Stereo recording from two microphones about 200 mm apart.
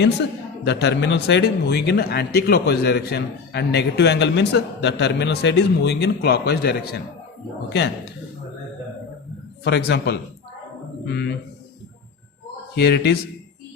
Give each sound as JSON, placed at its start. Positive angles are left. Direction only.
{"t": 0.6, "sound": "speech", "side_deg": 55}
{"t": 9.6, "sound": "speech", "side_deg": 60}
{"t": 12.7, "sound": "speech", "side_deg": 55}